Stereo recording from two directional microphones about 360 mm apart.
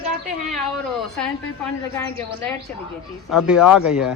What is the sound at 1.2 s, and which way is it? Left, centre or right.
Speech, centre.